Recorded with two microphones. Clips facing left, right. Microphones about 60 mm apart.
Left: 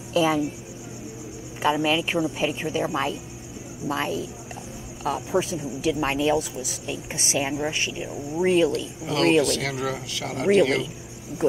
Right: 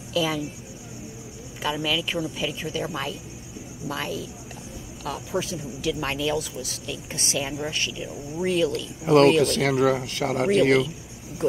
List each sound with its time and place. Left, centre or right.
0.1 s speech: left
1.6 s speech: left
9.0 s speech: right